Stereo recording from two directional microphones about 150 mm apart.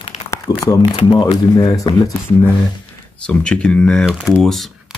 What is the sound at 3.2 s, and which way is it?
Speech, 5° left (ahead or behind).